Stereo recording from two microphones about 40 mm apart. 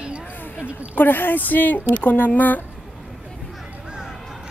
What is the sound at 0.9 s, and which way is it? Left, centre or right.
Speech, left.